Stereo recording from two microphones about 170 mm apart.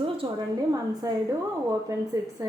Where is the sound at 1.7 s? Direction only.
20° right (ahead or behind).